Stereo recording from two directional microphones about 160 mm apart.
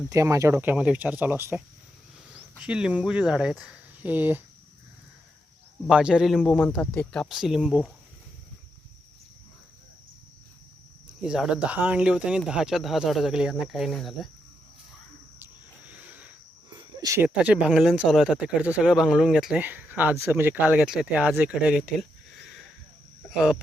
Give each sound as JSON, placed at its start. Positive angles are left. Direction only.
{"t": 0.1, "sound": "speech", "side_deg": -20}
{"t": 5.9, "sound": "speech", "side_deg": -5}
{"t": 11.3, "sound": "speech", "side_deg": -5}
{"t": 15.9, "sound": "a sound", "side_deg": -10}
{"t": 16.7, "sound": "cricket", "side_deg": -25}
{"t": 17.2, "sound": "speech", "side_deg": -10}
{"t": 23.3, "sound": "speech", "side_deg": -5}